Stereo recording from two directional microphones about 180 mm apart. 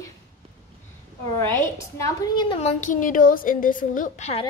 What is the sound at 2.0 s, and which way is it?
Speech, 25° left (ahead or behind).